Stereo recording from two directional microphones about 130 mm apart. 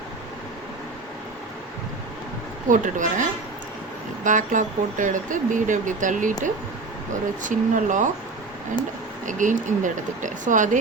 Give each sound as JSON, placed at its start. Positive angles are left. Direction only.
{"t": 2.6, "sound": "speech", "side_deg": -80}
{"t": 7.4, "sound": "speech", "side_deg": -75}
{"t": 9.2, "sound": "speech", "side_deg": -75}